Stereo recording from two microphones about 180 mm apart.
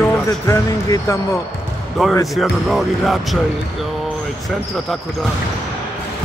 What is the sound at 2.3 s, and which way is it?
Speech, centre (ahead or behind).